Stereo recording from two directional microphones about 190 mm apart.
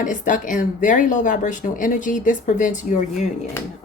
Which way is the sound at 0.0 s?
40° left (ahead or behind).